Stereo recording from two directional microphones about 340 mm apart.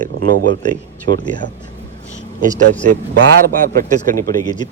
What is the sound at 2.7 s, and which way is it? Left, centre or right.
A man's voice, right.